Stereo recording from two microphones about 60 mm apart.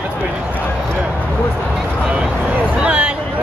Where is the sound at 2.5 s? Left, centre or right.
Right.